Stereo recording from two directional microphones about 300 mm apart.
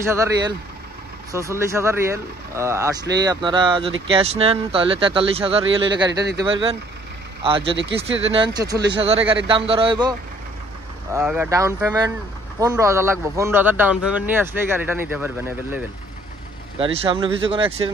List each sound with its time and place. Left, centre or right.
0.0 s a man's voice: centre
11.1 s a man's voice: centre
16.7 s a man's voice: centre